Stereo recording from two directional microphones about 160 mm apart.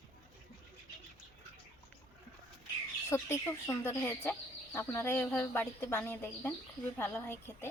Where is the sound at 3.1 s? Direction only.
15° left (ahead or behind).